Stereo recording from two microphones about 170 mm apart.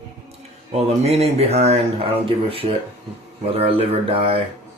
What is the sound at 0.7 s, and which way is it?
Speech, 40° right (ahead or behind).